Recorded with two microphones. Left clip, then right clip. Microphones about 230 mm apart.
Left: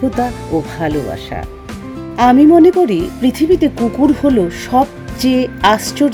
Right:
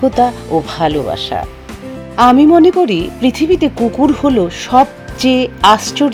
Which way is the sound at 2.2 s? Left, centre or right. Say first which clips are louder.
Even; right.